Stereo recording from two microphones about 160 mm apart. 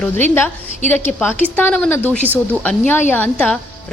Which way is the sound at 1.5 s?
10° left (ahead or behind).